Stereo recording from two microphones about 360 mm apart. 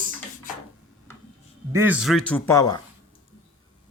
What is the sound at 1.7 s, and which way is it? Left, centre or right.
A man's voice, centre.